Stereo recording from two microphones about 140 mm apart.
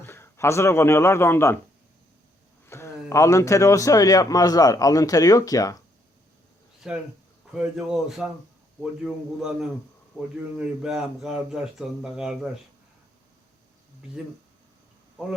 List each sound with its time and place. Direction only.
0.0 s a man's voice: 15° left (ahead or behind)
2.6 s a man's voice: 20° left (ahead or behind)
6.8 s speech: 5° right (ahead or behind)